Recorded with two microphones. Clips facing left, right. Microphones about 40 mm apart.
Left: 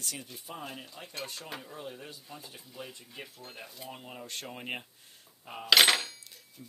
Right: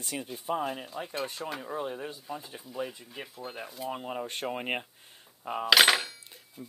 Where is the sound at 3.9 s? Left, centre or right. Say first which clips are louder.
Right 7 dB; right.